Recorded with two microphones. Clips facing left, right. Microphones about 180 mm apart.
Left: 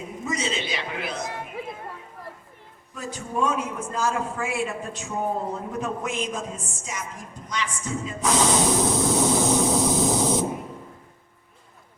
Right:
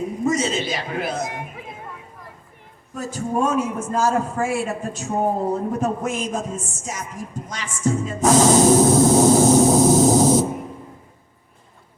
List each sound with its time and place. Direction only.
0.3 s a man's voice: 45° right (ahead or behind)
2.9 s a man's voice: 45° right (ahead or behind)
7.4 s a sound: 45° right (ahead or behind)